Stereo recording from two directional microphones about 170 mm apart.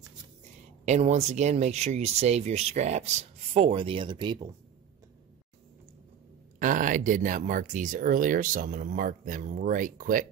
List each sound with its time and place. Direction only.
0.8 s speech: 40° right (ahead or behind); by 4.6 s 25° right (ahead or behind)
6.6 s speech: 50° right (ahead or behind)